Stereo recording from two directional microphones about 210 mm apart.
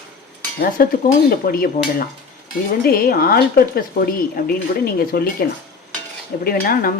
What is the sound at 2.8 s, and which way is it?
Dishes, 45° left (ahead or behind).